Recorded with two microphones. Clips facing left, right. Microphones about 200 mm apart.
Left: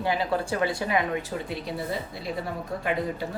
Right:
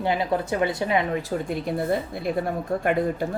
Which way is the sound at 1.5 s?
50° right (ahead or behind).